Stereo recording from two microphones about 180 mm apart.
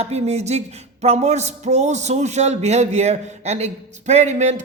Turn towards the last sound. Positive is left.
turn(degrees=-40)  # may be behind; listen again after turning